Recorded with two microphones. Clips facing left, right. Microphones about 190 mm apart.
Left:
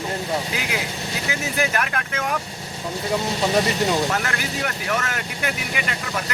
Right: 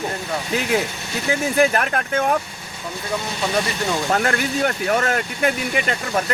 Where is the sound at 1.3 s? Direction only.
30° right (ahead or behind).